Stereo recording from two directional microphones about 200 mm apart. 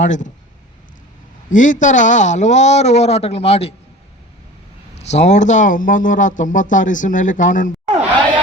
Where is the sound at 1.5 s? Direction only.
40° left (ahead or behind).